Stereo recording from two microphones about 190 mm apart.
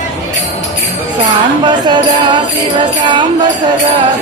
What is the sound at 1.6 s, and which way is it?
Music, 25° right (ahead or behind).